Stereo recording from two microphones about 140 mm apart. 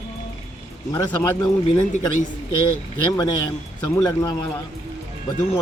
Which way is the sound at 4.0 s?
25° left (ahead or behind).